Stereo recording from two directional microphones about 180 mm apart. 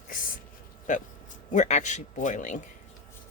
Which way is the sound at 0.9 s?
45° left (ahead or behind).